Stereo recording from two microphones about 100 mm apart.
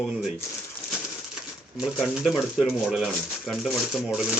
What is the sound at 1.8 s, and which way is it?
Speech, 10° right (ahead or behind).